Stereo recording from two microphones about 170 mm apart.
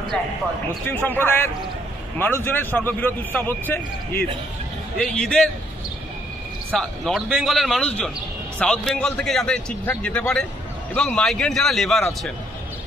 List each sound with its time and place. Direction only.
0.8 s a man's voice: 10° left (ahead or behind)
6.7 s a man's voice: centre (ahead or behind)